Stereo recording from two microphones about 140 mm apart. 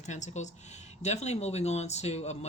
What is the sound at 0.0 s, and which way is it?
Speech, 55° left (ahead or behind).